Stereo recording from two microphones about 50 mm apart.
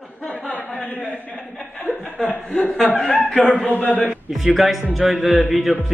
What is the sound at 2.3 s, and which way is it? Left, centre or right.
Speech, left.